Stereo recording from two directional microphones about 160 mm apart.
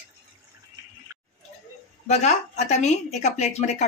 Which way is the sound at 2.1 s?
45° left (ahead or behind).